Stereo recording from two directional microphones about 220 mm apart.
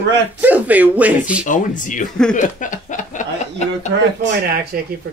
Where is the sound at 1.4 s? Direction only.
35° left (ahead or behind).